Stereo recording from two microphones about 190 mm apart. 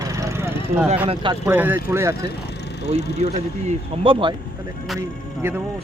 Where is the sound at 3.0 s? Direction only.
60° left (ahead or behind).